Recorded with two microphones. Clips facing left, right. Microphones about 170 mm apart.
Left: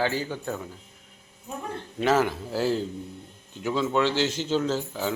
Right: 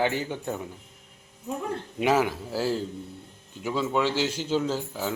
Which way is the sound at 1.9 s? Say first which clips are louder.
Left 1 dB; 10° right (ahead or behind).